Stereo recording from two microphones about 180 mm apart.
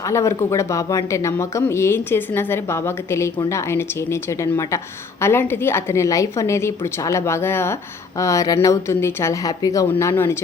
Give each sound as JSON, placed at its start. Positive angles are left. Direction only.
{"t": 0.0, "sound": "speech", "side_deg": 15}